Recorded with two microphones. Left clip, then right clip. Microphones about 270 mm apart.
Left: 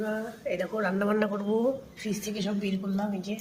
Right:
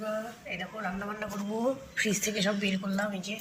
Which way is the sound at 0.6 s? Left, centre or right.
Left.